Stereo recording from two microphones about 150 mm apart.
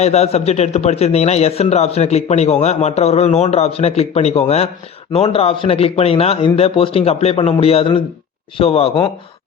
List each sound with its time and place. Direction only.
0.0 s a man's voice: 45° left (ahead or behind)